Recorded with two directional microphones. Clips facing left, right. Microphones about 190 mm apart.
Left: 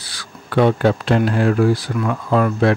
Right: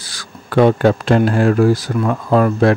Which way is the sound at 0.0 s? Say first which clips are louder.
Right 2 dB; 45° right (ahead or behind).